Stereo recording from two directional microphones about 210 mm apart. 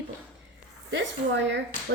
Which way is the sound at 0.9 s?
55° right (ahead or behind).